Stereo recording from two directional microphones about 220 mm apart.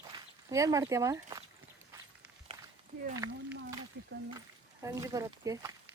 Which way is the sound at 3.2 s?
15° right (ahead or behind).